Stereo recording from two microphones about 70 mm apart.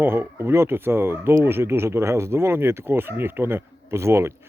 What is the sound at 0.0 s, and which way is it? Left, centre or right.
Speech, right.